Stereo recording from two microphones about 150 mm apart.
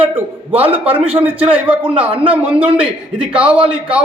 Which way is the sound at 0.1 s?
40° right (ahead or behind).